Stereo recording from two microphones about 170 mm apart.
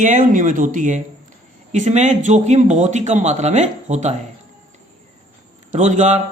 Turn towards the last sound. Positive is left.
turn(degrees=-45)  # may be behind; listen again after turning